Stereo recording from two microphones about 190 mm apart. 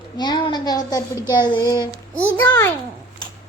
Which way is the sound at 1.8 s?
15° right (ahead or behind).